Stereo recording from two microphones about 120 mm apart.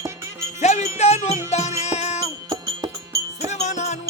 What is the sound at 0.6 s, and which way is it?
Wind chime, 70° left (ahead or behind).